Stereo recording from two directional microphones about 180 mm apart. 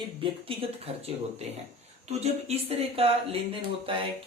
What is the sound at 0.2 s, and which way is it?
Speech, 30° right (ahead or behind).